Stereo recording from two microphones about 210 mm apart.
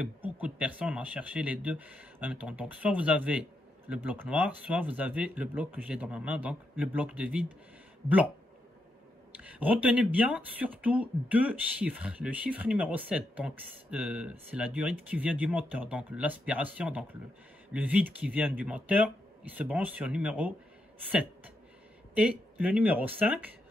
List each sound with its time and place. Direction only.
0.0 s speech: 5° right (ahead or behind)
9.4 s speech: 5° right (ahead or behind)
22.1 s speech: 5° right (ahead or behind)